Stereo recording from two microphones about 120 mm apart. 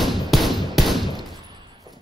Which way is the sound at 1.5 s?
35° right (ahead or behind).